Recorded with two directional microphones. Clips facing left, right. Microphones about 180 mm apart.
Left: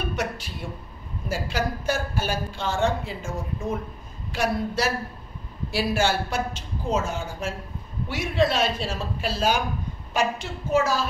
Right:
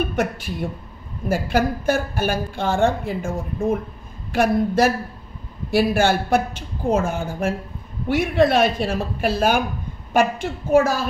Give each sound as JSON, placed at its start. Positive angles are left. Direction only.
{"t": 0.1, "sound": "a woman's voice", "side_deg": -55}